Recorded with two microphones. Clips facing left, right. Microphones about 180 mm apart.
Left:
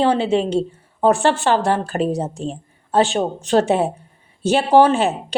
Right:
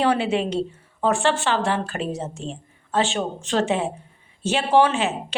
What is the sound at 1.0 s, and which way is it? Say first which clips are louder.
A woman's voice: left 5 dB; 40° left (ahead or behind).